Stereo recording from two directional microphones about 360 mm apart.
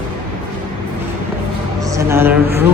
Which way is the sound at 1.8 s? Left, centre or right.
Centre.